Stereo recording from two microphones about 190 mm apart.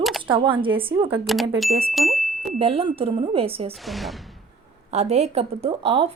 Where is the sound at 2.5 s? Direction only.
30° right (ahead or behind).